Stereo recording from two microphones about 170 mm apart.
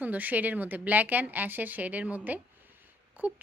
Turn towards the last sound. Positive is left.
turn(degrees=-10)  # may be behind; listen again after turning